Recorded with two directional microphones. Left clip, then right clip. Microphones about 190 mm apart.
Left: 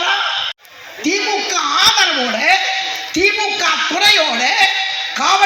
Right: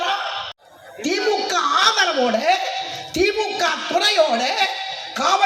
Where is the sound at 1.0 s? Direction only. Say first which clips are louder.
Left 3 dB; 60° right (ahead or behind).